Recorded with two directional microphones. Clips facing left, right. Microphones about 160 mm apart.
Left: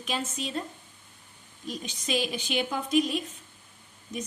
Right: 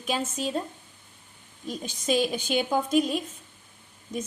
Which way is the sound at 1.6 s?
45° right (ahead or behind).